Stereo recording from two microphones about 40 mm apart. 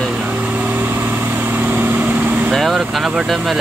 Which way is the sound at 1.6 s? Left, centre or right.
Right.